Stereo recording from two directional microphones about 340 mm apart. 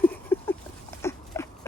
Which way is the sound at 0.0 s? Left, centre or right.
Centre.